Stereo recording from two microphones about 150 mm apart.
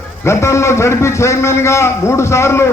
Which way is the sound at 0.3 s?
20° left (ahead or behind).